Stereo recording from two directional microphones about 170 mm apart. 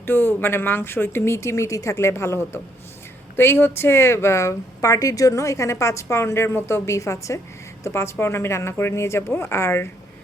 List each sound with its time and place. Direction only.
0.0 s speech: 10° left (ahead or behind)